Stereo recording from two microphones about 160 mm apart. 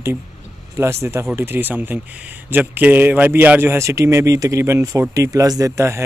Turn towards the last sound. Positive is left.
turn(degrees=-15)  # may be behind; listen again after turning